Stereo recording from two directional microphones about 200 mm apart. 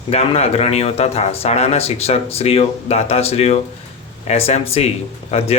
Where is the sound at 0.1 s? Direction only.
30° left (ahead or behind).